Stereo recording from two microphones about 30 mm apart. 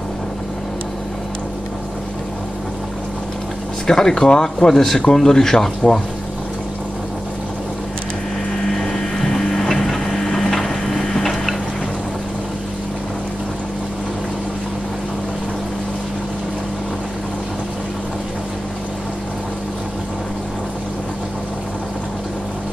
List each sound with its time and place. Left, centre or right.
3.8 s speech: centre
8.6 s vehicle: centre
10.5 s a sound: centre